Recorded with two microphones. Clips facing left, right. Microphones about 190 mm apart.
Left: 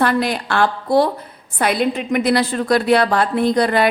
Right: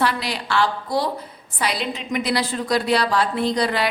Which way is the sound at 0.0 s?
50° left (ahead or behind).